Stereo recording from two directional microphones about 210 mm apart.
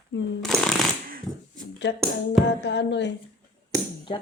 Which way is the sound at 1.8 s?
55° left (ahead or behind).